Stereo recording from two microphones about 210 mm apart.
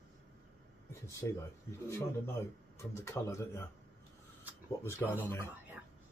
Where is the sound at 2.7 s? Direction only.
15° left (ahead or behind).